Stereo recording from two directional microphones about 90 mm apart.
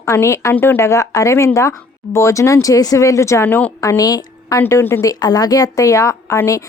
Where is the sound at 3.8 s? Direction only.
40° left (ahead or behind).